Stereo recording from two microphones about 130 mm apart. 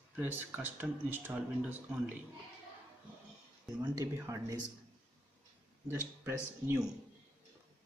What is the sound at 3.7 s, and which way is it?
Speech, 20° right (ahead or behind).